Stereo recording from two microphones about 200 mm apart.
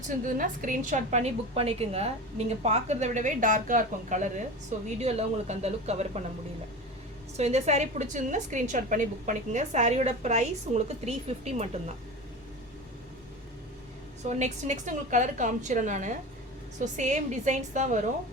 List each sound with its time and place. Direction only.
0.3 s a woman's voice: 40° right (ahead or behind)
7.3 s a woman's voice: 35° right (ahead or behind)
14.3 s a woman's voice: 35° right (ahead or behind)